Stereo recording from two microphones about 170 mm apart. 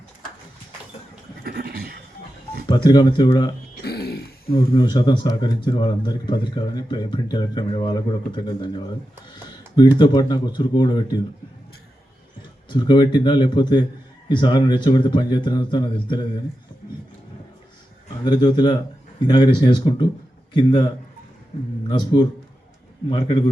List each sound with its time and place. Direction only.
1.5 s a sound: 65° right (ahead or behind)
2.6 s speech: 25° left (ahead or behind)
3.8 s throat clearing: 70° left (ahead or behind)
4.5 s speech: 25° left (ahead or behind)
10.0 s speech: 25° left (ahead or behind)
12.6 s speech: 30° left (ahead or behind)
18.3 s speech: 25° left (ahead or behind)